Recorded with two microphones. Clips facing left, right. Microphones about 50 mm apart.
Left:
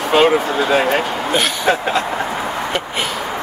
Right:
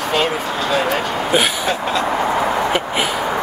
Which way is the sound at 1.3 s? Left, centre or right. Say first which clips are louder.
Right 3 dB; centre.